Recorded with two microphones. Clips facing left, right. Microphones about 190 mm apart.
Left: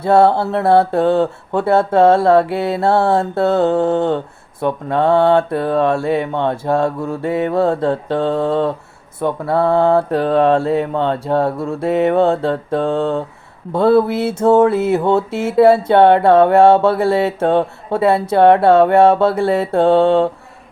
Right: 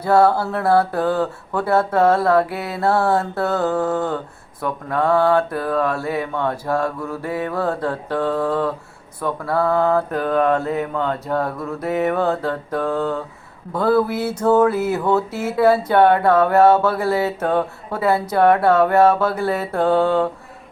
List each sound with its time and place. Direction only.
0.0 s mantra: 25° left (ahead or behind)